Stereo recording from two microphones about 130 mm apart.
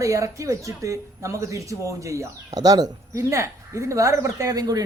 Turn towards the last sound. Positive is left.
turn(degrees=-30)  # may be behind; listen again after turning